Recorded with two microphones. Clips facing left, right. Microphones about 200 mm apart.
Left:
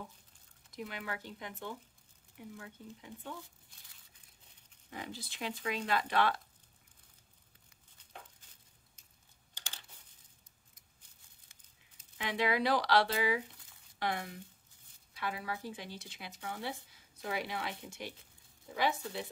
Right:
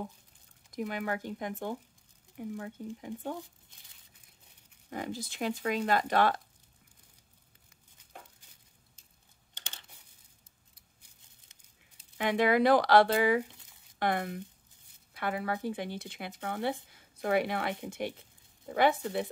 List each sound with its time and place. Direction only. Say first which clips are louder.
0.7 s speech: right 8 dB; 50° right (ahead or behind)
4.8 s speech: right 7 dB; 45° right (ahead or behind)
9.5 s computer keyboard: right 1 dB; 20° right (ahead or behind)
12.2 s speech: right 7 dB; 50° right (ahead or behind)